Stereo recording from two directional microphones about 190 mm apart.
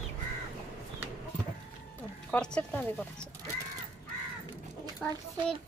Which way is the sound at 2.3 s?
5° left (ahead or behind).